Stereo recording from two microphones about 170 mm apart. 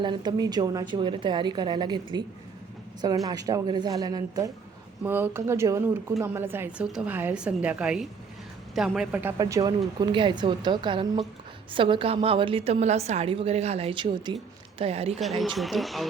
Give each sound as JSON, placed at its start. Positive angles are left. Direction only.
{"t": 0.0, "sound": "a woman's voice", "side_deg": -25}
{"t": 3.2, "sound": "a woman's voice", "side_deg": -20}
{"t": 9.4, "sound": "a woman's voice", "side_deg": -20}
{"t": 15.2, "sound": "a woman's voice", "side_deg": 0}